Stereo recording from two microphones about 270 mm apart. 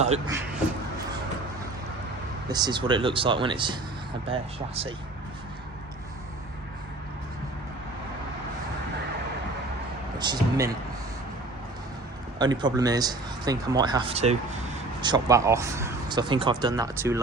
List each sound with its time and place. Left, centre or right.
2.5 s speech: centre
10.2 s speech: centre
12.4 s speech: centre